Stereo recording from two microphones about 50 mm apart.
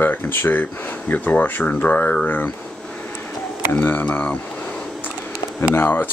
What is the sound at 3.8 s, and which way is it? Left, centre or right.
Speech, left.